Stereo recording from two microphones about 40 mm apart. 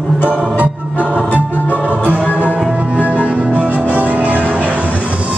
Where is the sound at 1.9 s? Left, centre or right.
Right.